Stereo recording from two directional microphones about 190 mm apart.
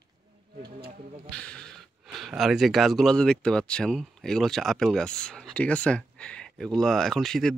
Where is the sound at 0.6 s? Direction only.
55° right (ahead or behind).